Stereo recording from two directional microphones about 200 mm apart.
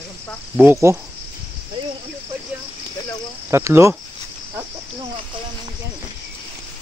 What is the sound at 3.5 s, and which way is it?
Speech, 15° right (ahead or behind).